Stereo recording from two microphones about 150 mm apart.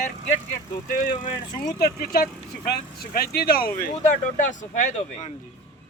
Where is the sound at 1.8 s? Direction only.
75° left (ahead or behind).